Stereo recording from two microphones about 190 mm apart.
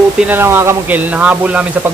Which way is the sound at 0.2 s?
10° right (ahead or behind).